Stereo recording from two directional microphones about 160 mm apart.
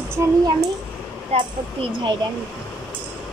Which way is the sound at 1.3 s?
35° right (ahead or behind).